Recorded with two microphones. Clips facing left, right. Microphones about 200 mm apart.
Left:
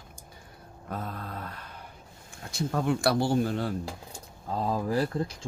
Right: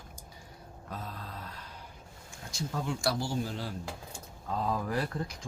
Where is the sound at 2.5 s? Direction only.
60° left (ahead or behind).